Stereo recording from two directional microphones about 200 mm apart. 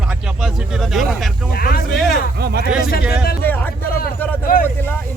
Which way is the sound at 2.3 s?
55° right (ahead or behind).